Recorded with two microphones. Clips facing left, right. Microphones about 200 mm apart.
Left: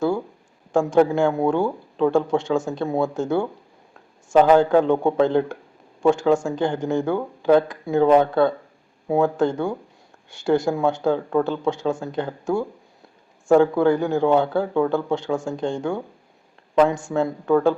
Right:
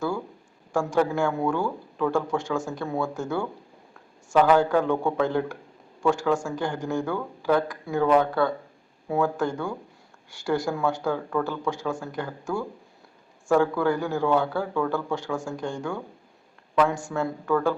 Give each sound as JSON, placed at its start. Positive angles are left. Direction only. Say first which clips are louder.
{"t": 0.7, "sound": "speech", "louder": "left 6 dB", "side_deg": 20}
{"t": 17.1, "sound": "speech", "louder": "left 6 dB", "side_deg": 20}